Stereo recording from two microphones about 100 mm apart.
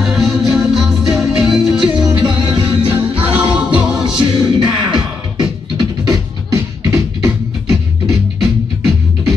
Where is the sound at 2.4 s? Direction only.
50° right (ahead or behind).